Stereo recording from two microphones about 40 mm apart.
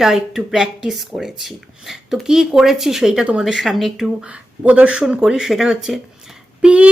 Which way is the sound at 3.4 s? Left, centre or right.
Centre.